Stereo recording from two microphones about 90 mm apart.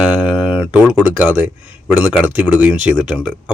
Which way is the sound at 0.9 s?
20° right (ahead or behind).